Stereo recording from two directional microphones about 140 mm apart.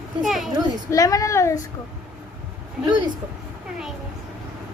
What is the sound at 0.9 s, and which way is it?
Speech, 25° left (ahead or behind).